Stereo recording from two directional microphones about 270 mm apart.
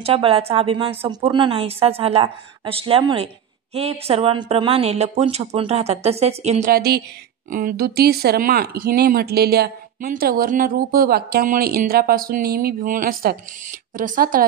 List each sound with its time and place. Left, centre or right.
0.0 s a woman's voice: right